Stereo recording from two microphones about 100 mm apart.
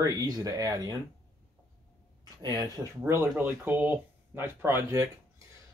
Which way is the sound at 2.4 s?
40° right (ahead or behind).